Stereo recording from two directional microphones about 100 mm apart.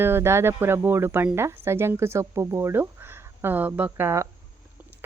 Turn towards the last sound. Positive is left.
turn(degrees=-25)  # may be behind; listen again after turning